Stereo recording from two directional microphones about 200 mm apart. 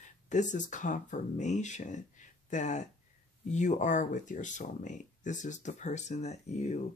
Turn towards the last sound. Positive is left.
turn(degrees=35)  # may be behind; listen again after turning